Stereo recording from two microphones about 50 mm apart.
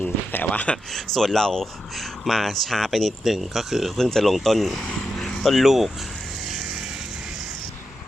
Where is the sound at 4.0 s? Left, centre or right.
Centre.